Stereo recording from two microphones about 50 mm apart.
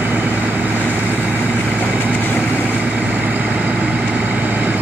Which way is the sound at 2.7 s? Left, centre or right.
Right.